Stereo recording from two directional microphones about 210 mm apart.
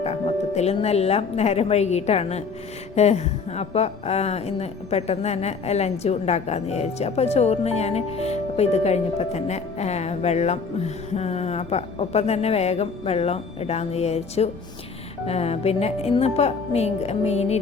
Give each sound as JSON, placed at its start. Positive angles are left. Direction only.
{"t": 0.0, "sound": "a woman's voice", "side_deg": 30}